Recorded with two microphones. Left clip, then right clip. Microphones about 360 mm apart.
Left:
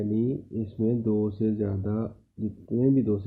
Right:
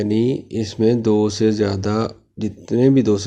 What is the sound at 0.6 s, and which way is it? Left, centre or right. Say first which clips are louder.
Speech: right 12 dB; right.